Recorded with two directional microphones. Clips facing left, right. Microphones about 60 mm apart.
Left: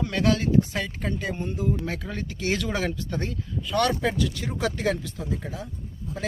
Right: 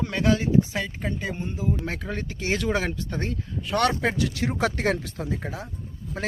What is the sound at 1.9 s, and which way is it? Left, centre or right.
Speech, right.